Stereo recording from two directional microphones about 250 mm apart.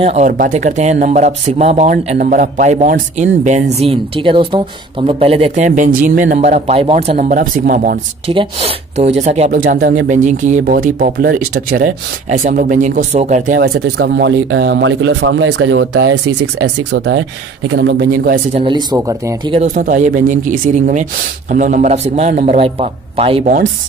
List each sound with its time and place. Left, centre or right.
0.0 s speech: right
5.7 s speech: right
8.3 s speech: right
18.6 s speech: centre
19.6 s speech: right